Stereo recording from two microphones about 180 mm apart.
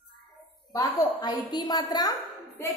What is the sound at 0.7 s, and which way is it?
A woman's voice, 20° left (ahead or behind).